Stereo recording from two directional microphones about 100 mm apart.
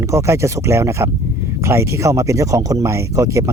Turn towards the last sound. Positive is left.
turn(degrees=-30)  # may be behind; listen again after turning